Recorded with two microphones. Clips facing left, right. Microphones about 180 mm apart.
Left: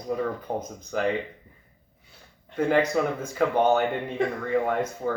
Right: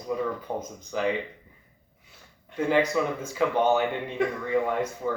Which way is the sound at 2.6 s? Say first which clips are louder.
Left 1 dB; 55° left (ahead or behind).